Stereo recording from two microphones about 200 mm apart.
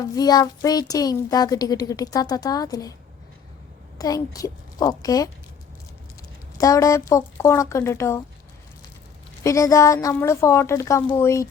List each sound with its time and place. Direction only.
0.2 s speech: 20° left (ahead or behind)
3.9 s a child's voice: 20° left (ahead or behind)
6.6 s a woman's voice: 15° left (ahead or behind)
9.4 s a woman's voice: 15° left (ahead or behind)